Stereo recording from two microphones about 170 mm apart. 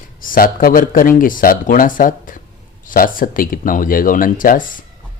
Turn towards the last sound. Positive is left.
turn(degrees=55)  # may be behind; listen again after turning